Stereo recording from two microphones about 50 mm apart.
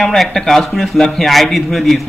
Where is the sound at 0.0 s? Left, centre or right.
Centre.